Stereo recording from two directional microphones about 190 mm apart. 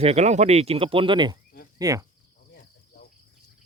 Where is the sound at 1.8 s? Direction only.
20° right (ahead or behind).